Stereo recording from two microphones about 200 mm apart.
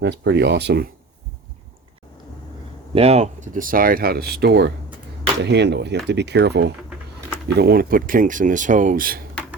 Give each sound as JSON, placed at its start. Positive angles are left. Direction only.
{"t": 0.0, "sound": "speech", "side_deg": -60}
{"t": 2.9, "sound": "speech", "side_deg": -30}